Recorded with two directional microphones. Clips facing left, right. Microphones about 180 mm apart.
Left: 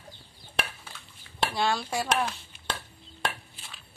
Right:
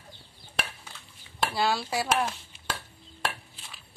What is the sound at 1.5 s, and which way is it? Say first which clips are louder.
Speech: right 1 dB; 5° right (ahead or behind).